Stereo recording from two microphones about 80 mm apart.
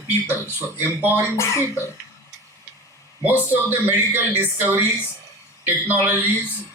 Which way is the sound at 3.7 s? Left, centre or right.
Right.